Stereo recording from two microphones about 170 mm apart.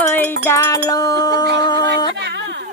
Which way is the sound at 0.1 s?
15° left (ahead or behind).